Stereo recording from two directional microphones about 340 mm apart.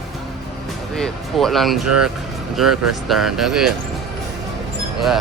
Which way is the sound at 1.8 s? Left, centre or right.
Right.